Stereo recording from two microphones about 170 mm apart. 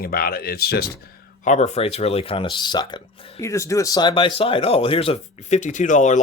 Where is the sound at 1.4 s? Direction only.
45° left (ahead or behind).